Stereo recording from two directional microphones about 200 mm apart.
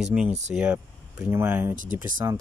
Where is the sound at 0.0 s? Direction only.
5° right (ahead or behind).